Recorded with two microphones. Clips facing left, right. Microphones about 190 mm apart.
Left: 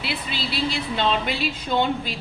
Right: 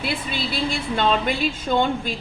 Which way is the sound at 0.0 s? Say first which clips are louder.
Right 3 dB; 50° right (ahead or behind).